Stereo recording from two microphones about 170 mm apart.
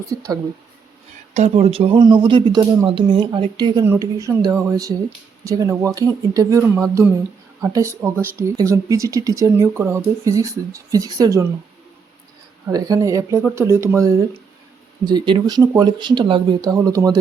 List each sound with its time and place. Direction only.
0.1 s speech: 20° right (ahead or behind)
1.3 s speech: 40° right (ahead or behind); by 11.4 s 20° right (ahead or behind)
12.6 s speech: 20° right (ahead or behind)